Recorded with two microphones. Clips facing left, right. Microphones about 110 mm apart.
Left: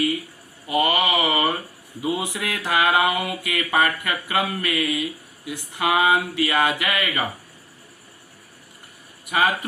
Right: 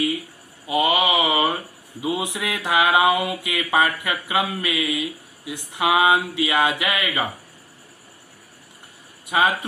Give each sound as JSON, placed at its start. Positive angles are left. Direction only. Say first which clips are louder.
{"t": 0.7, "sound": "mantra", "louder": "right 1 dB", "side_deg": -15}
{"t": 2.0, "sound": "a sound", "louder": "even", "side_deg": -15}
{"t": 9.2, "sound": "speech", "louder": "right 1 dB", "side_deg": -20}